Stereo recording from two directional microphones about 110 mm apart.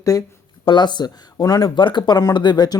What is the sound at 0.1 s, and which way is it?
Speech, 30° left (ahead or behind).